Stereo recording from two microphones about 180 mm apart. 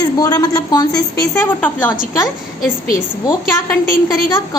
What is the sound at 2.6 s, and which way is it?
Speech, 50° left (ahead or behind).